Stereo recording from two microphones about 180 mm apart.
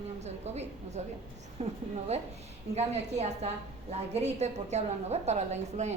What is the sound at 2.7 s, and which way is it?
A woman's voice, 35° right (ahead or behind).